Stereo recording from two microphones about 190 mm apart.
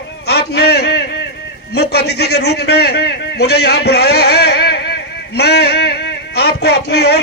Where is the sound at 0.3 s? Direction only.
60° left (ahead or behind).